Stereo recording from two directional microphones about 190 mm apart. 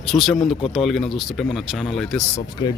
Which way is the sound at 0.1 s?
Centre (ahead or behind).